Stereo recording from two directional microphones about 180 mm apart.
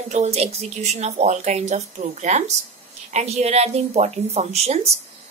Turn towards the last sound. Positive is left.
turn(degrees=-35)  # may be behind; listen again after turning